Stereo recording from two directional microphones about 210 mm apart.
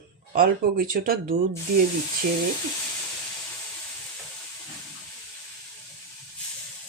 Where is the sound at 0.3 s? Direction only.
45° right (ahead or behind).